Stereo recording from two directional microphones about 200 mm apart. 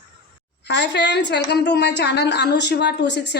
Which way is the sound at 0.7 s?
60° left (ahead or behind).